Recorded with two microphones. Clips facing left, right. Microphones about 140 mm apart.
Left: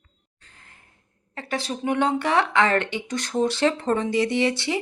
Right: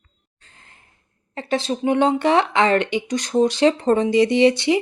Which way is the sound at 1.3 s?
25° right (ahead or behind).